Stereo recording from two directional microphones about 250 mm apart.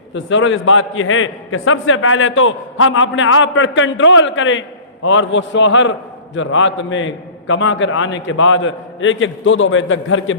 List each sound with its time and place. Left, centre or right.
0.1 s a man's voice: left